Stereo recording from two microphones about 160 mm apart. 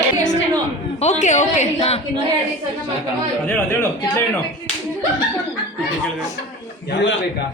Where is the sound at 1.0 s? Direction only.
45° left (ahead or behind).